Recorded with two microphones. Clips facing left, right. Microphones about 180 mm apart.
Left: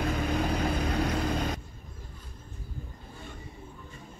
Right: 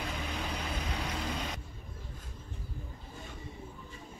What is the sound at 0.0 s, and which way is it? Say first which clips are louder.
Vehicle: left 9 dB; 50° left (ahead or behind).